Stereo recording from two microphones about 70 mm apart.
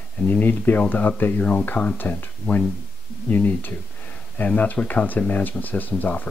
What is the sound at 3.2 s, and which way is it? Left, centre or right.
Speech, left.